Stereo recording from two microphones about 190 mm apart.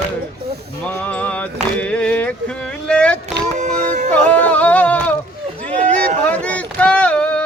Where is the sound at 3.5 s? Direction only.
40° right (ahead or behind).